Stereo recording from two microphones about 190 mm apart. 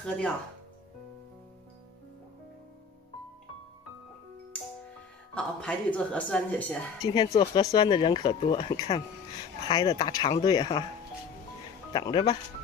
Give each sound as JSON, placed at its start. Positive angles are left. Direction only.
{"t": 0.0, "sound": "speech", "side_deg": 5}
{"t": 5.3, "sound": "speech", "side_deg": 5}
{"t": 7.2, "sound": "speech", "side_deg": 25}
{"t": 11.9, "sound": "speech", "side_deg": 25}